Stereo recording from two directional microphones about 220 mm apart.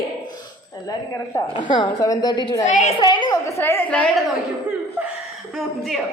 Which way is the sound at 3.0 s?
20° left (ahead or behind).